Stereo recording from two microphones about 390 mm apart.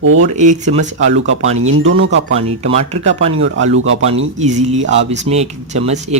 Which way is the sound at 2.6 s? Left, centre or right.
Centre.